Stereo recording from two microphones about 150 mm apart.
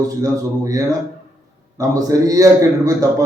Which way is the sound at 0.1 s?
25° right (ahead or behind).